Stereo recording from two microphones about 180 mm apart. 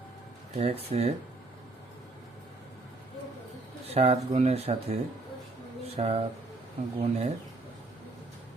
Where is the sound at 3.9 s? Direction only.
35° right (ahead or behind).